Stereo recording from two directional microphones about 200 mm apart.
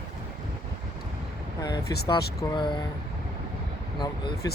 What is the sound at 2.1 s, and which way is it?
Speech, 25° left (ahead or behind).